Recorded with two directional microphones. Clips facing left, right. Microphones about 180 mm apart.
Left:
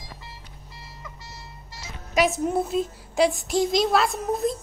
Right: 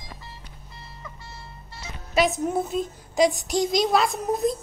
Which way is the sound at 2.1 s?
5° left (ahead or behind).